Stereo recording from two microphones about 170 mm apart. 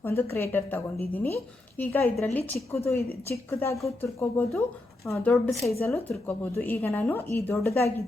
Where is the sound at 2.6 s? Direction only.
Centre (ahead or behind).